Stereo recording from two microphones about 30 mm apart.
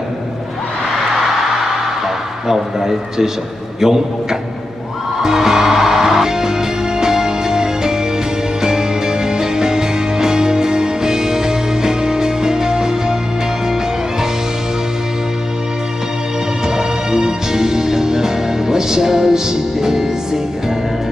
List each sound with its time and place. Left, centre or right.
2.0 s a man's voice: centre
5.2 s music: centre
16.6 s music: right